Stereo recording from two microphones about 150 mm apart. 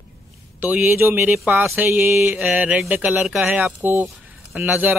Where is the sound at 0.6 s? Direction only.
15° right (ahead or behind).